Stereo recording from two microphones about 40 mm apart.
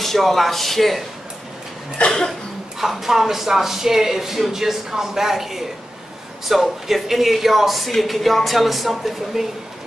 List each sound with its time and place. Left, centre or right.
0.0 s a woman's voice: centre
2.0 s cough: centre
2.8 s a woman's voice: centre